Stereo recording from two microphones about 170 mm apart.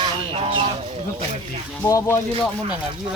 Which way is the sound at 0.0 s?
35° right (ahead or behind).